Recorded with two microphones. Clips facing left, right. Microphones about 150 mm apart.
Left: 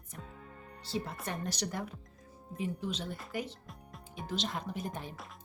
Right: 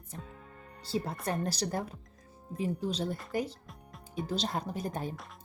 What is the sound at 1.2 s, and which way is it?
Speech, 35° right (ahead or behind).